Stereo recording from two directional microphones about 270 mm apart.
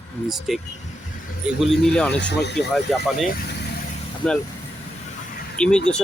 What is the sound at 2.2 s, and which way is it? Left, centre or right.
Speech, left.